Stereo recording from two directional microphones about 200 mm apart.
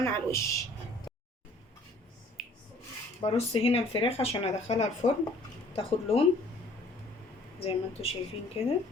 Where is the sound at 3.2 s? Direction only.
30° left (ahead or behind).